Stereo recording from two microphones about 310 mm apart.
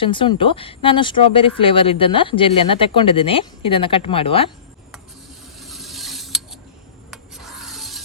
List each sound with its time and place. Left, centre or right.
0.0 s speech: centre
5.5 s mechanisms: centre
7.1 s music: centre